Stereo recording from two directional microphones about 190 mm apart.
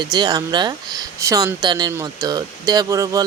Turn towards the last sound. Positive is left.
turn(degrees=-15)  # may be behind; listen again after turning